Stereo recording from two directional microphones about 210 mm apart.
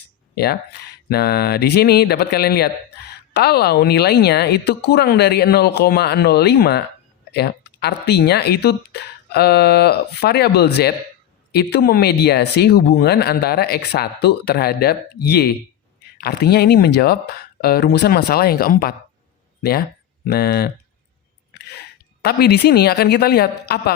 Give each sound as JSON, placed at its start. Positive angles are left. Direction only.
{"t": 0.3, "sound": "speech", "side_deg": 50}
{"t": 20.2, "sound": "speech", "side_deg": 50}
{"t": 22.2, "sound": "speech", "side_deg": 50}